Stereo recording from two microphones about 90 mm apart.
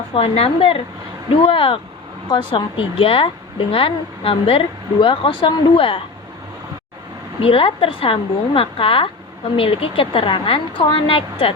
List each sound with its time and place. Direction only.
0.1 s a woman's voice: 90° left
2.3 s speech: 60° left (ahead or behind); by 6.0 s 85° left
7.4 s a woman's voice: 85° left